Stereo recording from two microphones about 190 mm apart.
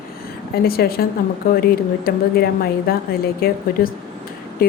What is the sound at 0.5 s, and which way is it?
Speech, 55° left (ahead or behind).